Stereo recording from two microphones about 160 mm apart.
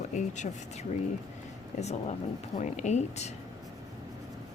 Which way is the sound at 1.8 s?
45° left (ahead or behind).